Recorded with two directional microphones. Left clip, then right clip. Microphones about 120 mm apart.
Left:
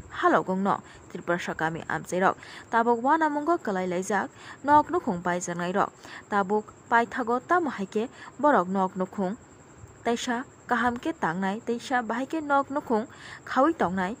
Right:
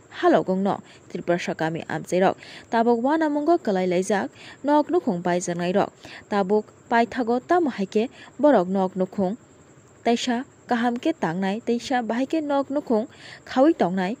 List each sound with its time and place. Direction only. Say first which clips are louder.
0.1 s a woman's voice: right 3 dB; 20° right (ahead or behind)